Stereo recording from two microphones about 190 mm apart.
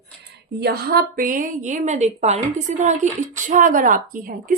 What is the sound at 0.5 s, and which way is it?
Speech, 55° right (ahead or behind).